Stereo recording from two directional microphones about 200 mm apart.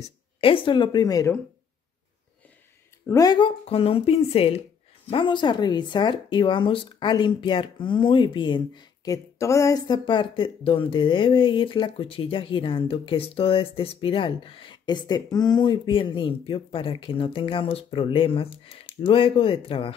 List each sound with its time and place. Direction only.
0.0 s speech: 25° left (ahead or behind)
3.1 s speech: 20° left (ahead or behind)